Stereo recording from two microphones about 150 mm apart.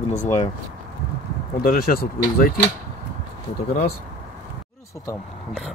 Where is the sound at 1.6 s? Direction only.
75° left (ahead or behind).